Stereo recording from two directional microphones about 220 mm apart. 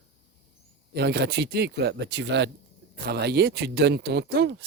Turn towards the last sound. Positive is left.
turn(degrees=-50)  # may be behind; listen again after turning